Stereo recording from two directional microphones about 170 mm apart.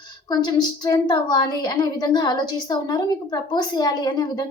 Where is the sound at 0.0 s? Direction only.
25° left (ahead or behind).